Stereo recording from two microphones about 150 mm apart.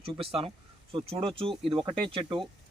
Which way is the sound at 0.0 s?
40° right (ahead or behind).